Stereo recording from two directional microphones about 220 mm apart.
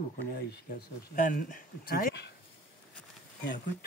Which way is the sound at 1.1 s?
35° left (ahead or behind).